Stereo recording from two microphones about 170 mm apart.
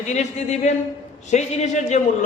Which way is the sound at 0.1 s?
45° left (ahead or behind).